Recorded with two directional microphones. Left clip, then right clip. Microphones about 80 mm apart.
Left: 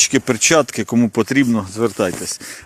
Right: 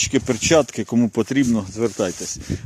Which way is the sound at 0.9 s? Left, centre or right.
Right.